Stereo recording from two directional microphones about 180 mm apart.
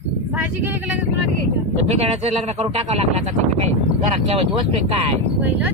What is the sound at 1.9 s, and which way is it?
Speech, 35° right (ahead or behind).